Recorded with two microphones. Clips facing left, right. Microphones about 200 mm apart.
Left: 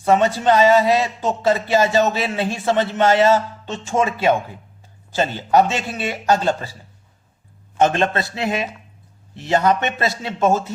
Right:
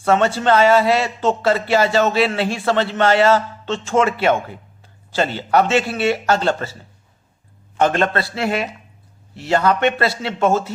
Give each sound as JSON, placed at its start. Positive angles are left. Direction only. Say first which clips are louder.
{"t": 0.0, "sound": "a man's voice", "louder": "even", "side_deg": 15}
{"t": 7.9, "sound": "a man's voice", "louder": "right 1 dB", "side_deg": 20}